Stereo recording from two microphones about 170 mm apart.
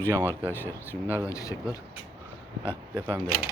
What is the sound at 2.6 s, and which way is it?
Speech, 15° left (ahead or behind).